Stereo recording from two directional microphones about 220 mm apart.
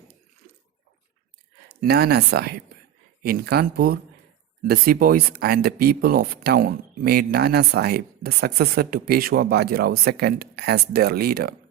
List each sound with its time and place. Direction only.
1.6 s speech: 45° right (ahead or behind)